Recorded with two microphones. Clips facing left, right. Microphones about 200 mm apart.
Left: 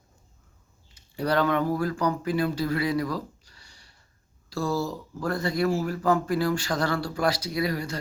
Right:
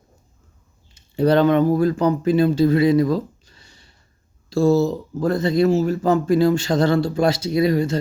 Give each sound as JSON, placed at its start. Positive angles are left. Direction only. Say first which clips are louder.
{"t": 0.9, "sound": "speech", "louder": "right 9 dB", "side_deg": -25}